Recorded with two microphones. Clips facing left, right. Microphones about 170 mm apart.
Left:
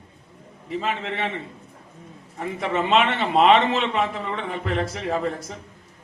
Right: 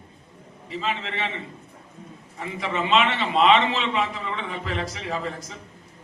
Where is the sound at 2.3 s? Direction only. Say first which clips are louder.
Left 3 dB; 55° left (ahead or behind).